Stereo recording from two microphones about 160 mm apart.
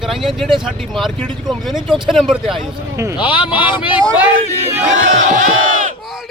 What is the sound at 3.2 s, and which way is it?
Speech, 30° left (ahead or behind).